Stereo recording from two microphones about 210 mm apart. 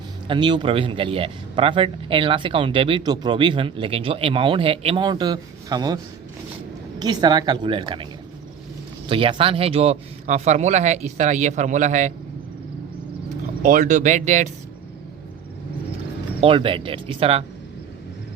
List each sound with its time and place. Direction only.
0.3 s speech: 20° right (ahead or behind)
7.0 s speech: 20° right (ahead or behind)
9.0 s speech: 25° right (ahead or behind)
13.6 s speech: 40° right (ahead or behind)
16.4 s speech: 25° right (ahead or behind)